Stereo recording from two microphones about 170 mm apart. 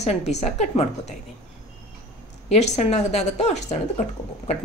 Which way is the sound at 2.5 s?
40° left (ahead or behind).